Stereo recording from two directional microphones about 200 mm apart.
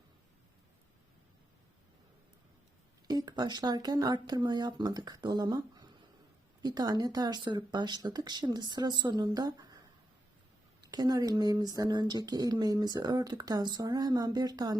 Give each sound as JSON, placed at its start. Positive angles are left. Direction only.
{"t": 3.1, "sound": "speech", "side_deg": -20}
{"t": 10.8, "sound": "speech", "side_deg": -20}